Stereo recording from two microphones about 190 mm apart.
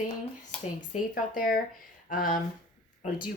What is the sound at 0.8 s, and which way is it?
Speech, 45° left (ahead or behind).